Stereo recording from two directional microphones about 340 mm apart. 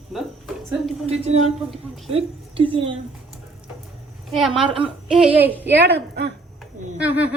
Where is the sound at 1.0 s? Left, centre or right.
Centre.